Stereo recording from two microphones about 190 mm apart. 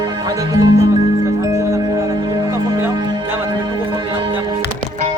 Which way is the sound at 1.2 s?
15° right (ahead or behind).